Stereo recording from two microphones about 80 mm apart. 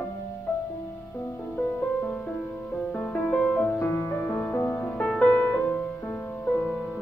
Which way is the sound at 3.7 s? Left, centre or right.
Left.